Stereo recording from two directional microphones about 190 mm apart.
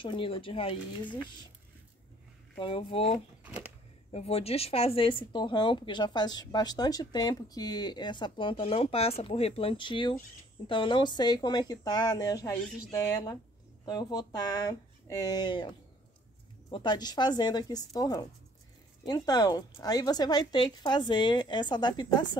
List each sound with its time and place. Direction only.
0.0 s speech: 25° left (ahead or behind)
2.6 s speech: 30° left (ahead or behind)
16.7 s speech: 25° left (ahead or behind)